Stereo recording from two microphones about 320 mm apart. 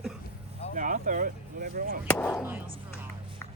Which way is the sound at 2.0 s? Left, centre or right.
Centre.